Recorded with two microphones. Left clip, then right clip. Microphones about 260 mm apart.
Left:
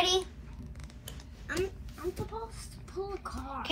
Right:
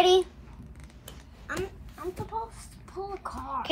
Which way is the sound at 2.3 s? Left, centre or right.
Right.